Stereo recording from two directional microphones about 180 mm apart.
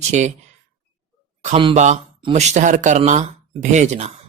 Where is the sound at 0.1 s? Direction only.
40° right (ahead or behind).